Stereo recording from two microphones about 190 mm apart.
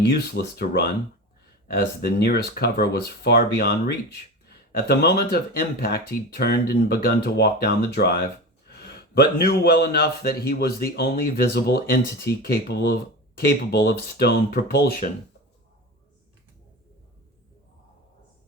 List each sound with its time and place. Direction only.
0.1 s speech: 55° left (ahead or behind)